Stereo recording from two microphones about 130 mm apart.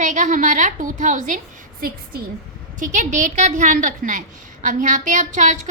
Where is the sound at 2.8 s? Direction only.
75° right (ahead or behind).